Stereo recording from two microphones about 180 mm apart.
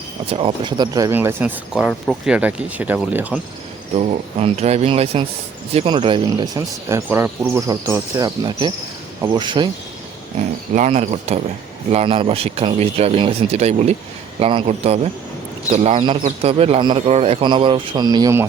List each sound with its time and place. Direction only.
0.3 s speech: 30° right (ahead or behind); by 3.4 s 10° right (ahead or behind)
3.9 s a man's voice: 35° right (ahead or behind)
10.8 s a man's voice: 40° right (ahead or behind); by 18.4 s 20° right (ahead or behind)